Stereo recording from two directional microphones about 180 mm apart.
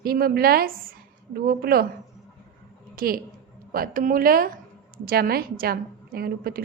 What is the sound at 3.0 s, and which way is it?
A woman's voice, 55° right (ahead or behind).